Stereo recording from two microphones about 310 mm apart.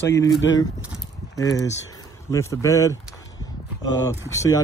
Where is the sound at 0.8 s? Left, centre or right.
Centre.